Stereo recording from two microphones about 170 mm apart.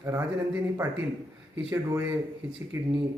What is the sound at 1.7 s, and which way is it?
Speech, 15° right (ahead or behind).